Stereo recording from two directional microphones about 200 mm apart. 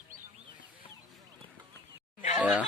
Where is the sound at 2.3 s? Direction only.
5° right (ahead or behind).